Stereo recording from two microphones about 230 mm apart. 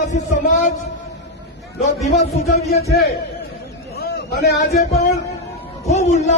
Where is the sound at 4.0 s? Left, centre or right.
Left.